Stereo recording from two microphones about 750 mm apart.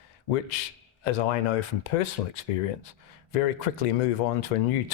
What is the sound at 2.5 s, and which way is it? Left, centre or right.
Speech, left.